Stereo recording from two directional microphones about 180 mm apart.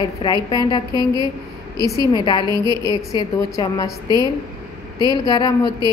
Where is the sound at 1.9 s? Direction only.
20° left (ahead or behind).